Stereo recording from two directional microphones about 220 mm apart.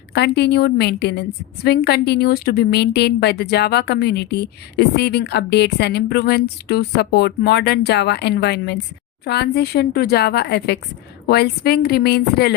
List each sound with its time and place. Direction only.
0.1 s a woman's voice: 50° left (ahead or behind)